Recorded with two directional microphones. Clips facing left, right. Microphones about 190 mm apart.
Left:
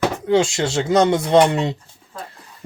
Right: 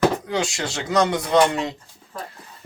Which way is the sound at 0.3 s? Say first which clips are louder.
Left 8 dB; 25° left (ahead or behind).